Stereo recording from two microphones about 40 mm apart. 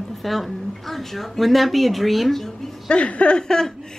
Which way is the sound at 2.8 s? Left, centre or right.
Left.